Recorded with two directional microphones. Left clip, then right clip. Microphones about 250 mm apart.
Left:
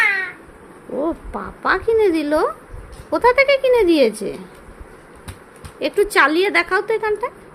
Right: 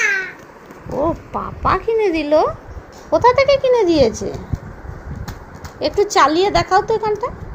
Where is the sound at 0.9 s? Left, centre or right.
Centre.